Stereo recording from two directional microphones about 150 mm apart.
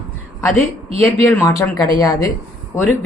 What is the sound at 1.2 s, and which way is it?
A woman's voice, 20° left (ahead or behind).